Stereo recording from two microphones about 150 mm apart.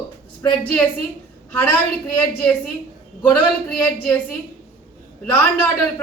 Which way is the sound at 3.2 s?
10° left (ahead or behind).